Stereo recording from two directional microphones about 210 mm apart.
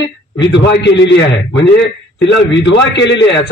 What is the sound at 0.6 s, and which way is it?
A man's voice, 55° left (ahead or behind).